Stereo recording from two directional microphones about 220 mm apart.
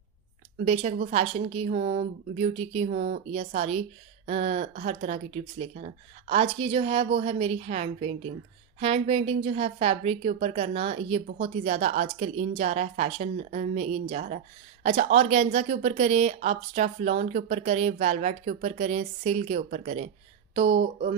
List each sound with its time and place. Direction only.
0.7 s speech: 30° right (ahead or behind)